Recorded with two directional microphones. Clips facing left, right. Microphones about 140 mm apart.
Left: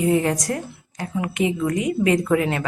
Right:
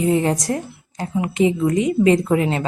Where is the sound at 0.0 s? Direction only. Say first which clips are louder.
Right 1 dB; 25° right (ahead or behind).